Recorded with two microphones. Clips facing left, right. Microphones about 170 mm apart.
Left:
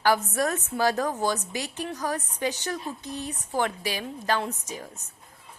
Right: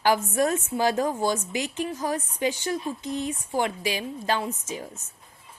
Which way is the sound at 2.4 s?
15° right (ahead or behind).